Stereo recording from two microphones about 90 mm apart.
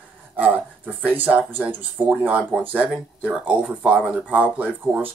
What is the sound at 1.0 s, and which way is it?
Speech, 20° right (ahead or behind).